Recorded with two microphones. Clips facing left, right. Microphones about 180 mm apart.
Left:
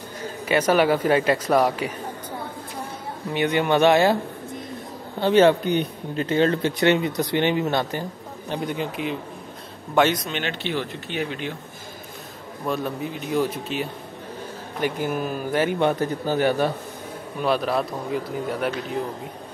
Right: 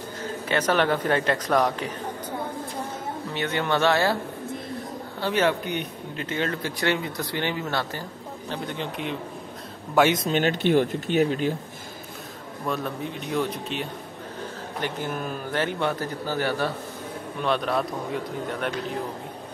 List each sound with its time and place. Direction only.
0.2 s a man's voice: 10° left (ahead or behind)
3.3 s a man's voice: 15° left (ahead or behind)
5.2 s a man's voice: 30° left (ahead or behind); by 9.1 s 5° left (ahead or behind)
10.0 s a man's voice: 5° right (ahead or behind)
10.3 s speech: 45° right (ahead or behind)
12.6 s a man's voice: centre (ahead or behind)
17.4 s a man's voice: 5° left (ahead or behind)